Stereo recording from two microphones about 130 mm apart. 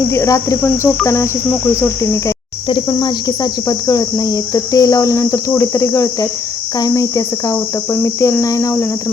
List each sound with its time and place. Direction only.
0.1 s cricket: 25° left (ahead or behind)
2.6 s cricket: 35° left (ahead or behind)